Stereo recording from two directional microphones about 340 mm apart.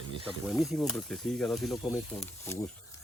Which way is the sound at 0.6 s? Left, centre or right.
Centre.